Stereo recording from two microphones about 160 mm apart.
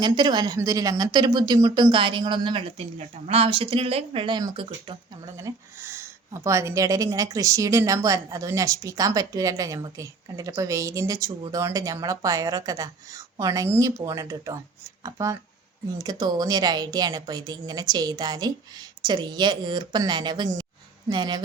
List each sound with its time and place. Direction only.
0.0 s speech: 25° right (ahead or behind)
5.4 s speech: 15° right (ahead or behind)